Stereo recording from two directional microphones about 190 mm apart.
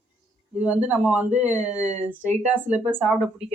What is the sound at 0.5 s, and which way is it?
A man's voice, 5° right (ahead or behind).